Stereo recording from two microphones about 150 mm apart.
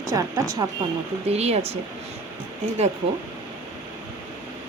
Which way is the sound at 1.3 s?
45° right (ahead or behind).